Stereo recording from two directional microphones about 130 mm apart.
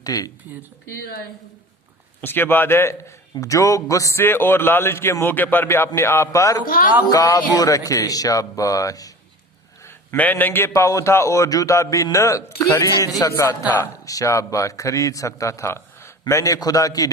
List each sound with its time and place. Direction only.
0.0 s speech: 30° left (ahead or behind)
2.2 s a man's voice: 15° left (ahead or behind)
9.8 s a man's voice: 15° left (ahead or behind)